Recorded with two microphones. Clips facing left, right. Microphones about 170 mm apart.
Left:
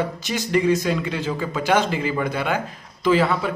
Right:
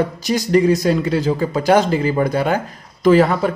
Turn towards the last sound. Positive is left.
turn(degrees=-45)  # may be behind; listen again after turning